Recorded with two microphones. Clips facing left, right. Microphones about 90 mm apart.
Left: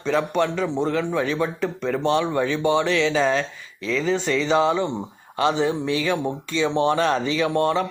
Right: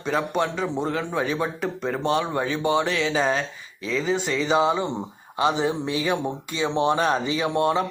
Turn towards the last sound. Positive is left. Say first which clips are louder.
# left 1 dB
turn(degrees=-15)  # may be behind; listen again after turning